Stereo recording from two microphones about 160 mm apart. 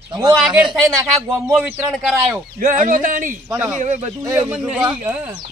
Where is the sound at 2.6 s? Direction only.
55° right (ahead or behind).